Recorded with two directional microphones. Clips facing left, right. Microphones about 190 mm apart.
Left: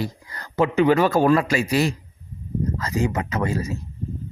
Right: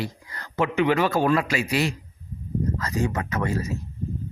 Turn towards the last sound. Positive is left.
turn(degrees=25)  # may be behind; listen again after turning